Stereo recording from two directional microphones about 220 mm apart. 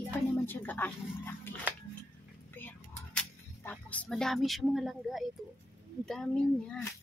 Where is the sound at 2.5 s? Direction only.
10° left (ahead or behind).